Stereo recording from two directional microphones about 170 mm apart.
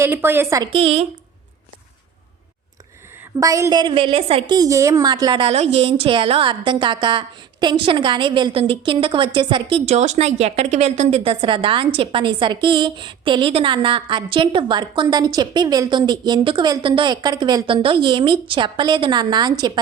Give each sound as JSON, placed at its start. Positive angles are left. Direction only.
{"t": 0.0, "sound": "a woman's voice", "side_deg": -15}
{"t": 0.6, "sound": "a woman's voice", "side_deg": -35}
{"t": 3.4, "sound": "a woman's voice", "side_deg": -20}